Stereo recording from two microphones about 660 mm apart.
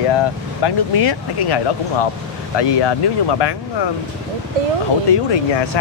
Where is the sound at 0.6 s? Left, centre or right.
Left.